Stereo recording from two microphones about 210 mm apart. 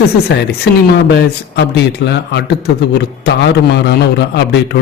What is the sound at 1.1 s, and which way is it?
A man's voice, 55° left (ahead or behind).